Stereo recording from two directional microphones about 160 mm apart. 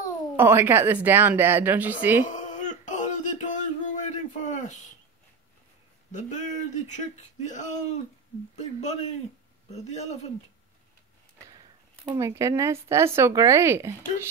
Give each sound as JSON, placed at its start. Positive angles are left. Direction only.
{"t": 0.4, "sound": "speech", "side_deg": -15}
{"t": 2.2, "sound": "a sound", "side_deg": 50}
{"t": 6.1, "sound": "speech", "side_deg": 50}
{"t": 12.0, "sound": "speech", "side_deg": -20}